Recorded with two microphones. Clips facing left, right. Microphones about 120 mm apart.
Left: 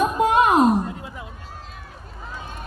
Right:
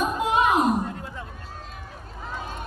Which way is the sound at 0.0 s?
55° left (ahead or behind).